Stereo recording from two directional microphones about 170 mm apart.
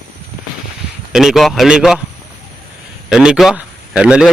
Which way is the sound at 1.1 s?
Centre (ahead or behind).